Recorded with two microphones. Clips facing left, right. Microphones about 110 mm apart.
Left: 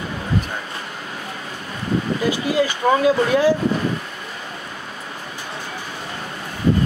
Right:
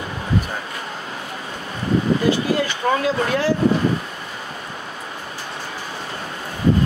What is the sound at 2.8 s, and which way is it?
Speech, 10° left (ahead or behind).